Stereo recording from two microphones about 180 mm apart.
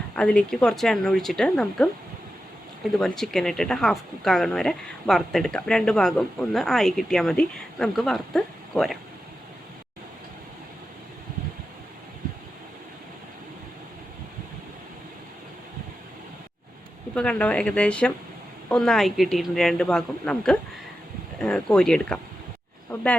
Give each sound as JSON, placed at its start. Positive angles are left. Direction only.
{"t": 0.2, "sound": "speech", "side_deg": 5}
{"t": 3.0, "sound": "speech", "side_deg": 0}
{"t": 17.2, "sound": "speech", "side_deg": 5}